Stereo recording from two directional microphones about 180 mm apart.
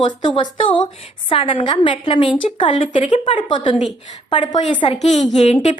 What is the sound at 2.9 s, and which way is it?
Speech, 40° left (ahead or behind).